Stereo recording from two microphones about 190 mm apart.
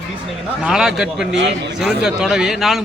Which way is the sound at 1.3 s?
70° right (ahead or behind).